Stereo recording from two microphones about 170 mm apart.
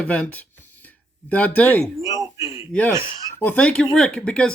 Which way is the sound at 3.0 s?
30° left (ahead or behind).